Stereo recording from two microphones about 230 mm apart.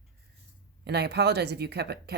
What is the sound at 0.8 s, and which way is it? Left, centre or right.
Speech, right.